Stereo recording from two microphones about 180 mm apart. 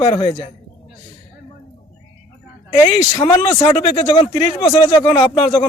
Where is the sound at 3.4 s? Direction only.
35° left (ahead or behind).